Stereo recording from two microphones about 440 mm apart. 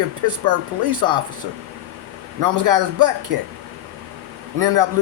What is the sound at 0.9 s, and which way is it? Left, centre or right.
Speech, right.